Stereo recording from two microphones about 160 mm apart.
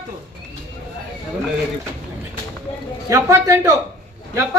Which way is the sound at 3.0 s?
20° right (ahead or behind).